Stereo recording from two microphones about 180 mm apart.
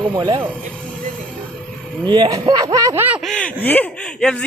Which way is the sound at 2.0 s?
25° right (ahead or behind).